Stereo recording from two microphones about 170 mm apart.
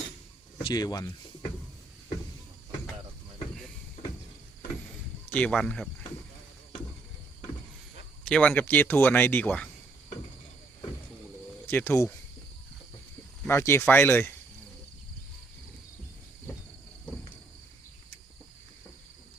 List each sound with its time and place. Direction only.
0.6 s speech: 25° left (ahead or behind)
5.3 s speech: 5° left (ahead or behind)
8.2 s speech: 5° left (ahead or behind)
11.6 s speech: 10° left (ahead or behind)
13.5 s speech: 15° left (ahead or behind)